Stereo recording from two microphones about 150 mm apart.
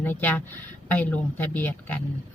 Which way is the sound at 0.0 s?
10° left (ahead or behind).